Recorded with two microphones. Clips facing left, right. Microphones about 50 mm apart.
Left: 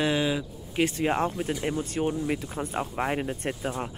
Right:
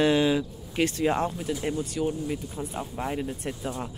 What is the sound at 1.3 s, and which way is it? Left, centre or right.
Speech, left.